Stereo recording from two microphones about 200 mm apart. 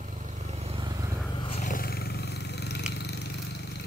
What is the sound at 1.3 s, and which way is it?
Roar, 25° left (ahead or behind).